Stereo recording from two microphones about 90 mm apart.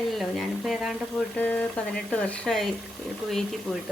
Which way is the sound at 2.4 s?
5° left (ahead or behind).